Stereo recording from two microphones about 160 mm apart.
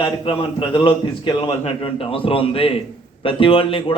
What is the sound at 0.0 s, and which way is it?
A man's voice, 35° left (ahead or behind).